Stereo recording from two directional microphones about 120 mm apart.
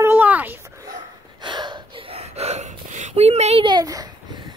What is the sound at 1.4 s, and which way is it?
Gasp, 40° right (ahead or behind).